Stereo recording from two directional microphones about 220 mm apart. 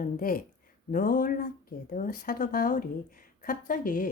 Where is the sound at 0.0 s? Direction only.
40° left (ahead or behind).